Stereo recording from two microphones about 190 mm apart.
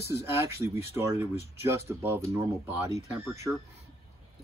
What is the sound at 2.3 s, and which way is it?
Speech, 10° right (ahead or behind).